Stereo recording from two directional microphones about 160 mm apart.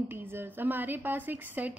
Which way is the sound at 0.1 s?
15° right (ahead or behind).